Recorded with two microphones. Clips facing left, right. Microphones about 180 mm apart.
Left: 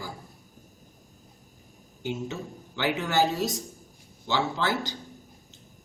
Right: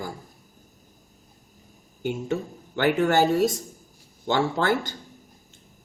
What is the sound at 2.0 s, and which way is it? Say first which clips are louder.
Speech: right 5 dB; 50° right (ahead or behind).